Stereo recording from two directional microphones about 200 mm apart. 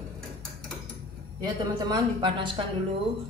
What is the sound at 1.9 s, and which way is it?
Speech, 20° right (ahead or behind).